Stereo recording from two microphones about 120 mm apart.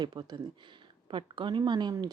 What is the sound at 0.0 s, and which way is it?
Speech, 35° right (ahead or behind).